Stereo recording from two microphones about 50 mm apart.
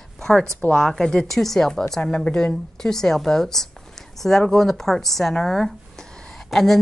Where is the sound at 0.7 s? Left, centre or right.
Centre.